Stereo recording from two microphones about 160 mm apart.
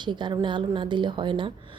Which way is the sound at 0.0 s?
30° right (ahead or behind).